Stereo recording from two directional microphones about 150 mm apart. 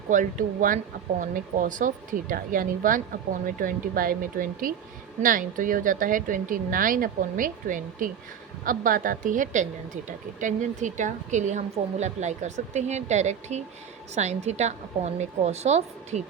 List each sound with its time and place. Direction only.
0.1 s a woman's voice: 60° right (ahead or behind)